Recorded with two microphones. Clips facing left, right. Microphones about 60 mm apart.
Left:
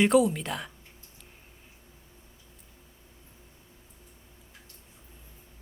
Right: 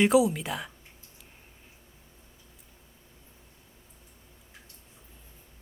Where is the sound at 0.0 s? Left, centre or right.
Centre.